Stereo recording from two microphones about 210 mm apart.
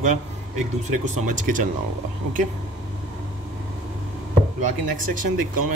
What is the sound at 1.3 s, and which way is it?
Speech, 40° right (ahead or behind).